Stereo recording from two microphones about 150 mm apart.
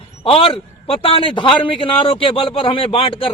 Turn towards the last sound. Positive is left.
turn(degrees=35)  # may be behind; listen again after turning